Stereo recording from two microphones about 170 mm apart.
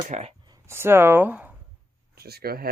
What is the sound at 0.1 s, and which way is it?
Speech, 45° right (ahead or behind).